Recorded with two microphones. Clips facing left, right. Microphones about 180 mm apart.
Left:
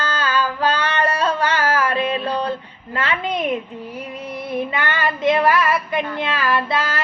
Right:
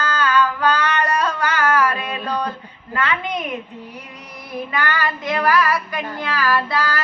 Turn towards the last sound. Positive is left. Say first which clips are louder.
# even
turn(degrees=20)  # may be behind; listen again after turning